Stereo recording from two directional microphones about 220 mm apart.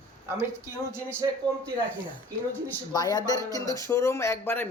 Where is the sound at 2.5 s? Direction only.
15° left (ahead or behind).